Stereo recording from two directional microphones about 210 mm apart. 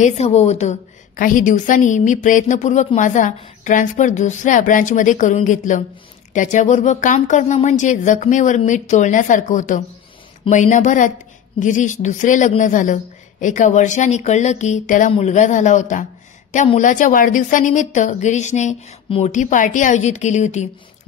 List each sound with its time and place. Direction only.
0.0 s a woman's voice: 30° left (ahead or behind)